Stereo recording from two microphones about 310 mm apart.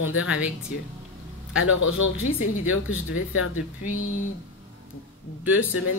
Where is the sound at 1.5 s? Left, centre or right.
Left.